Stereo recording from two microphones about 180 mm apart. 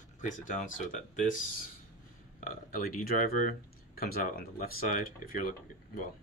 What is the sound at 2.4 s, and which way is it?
Speech, 50° left (ahead or behind).